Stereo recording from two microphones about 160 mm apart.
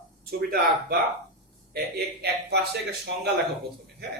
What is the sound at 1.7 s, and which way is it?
Speech, 90° right.